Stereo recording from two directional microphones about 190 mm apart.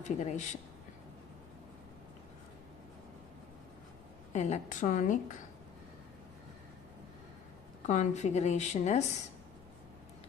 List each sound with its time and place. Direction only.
0.0 s a woman's voice: 40° left (ahead or behind)
4.3 s a woman's voice: 40° left (ahead or behind)
7.8 s a woman's voice: 40° left (ahead or behind)